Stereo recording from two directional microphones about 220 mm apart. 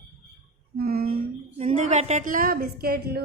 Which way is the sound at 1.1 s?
30° right (ahead or behind).